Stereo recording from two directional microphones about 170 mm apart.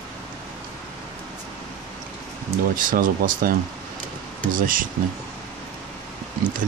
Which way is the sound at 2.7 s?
55° right (ahead or behind).